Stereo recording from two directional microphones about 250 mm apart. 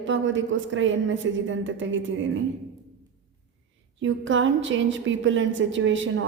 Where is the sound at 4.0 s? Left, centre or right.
Right.